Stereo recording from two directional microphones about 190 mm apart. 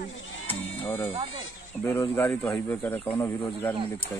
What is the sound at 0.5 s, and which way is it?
Music, 10° left (ahead or behind).